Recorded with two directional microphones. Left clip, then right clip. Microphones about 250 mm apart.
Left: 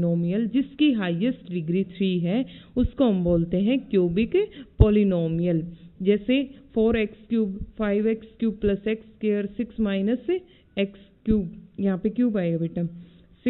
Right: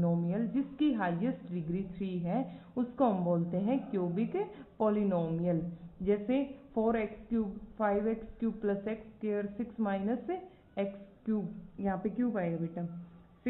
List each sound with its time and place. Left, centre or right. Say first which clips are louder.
0.0 s a woman's voice: left 8 dB; left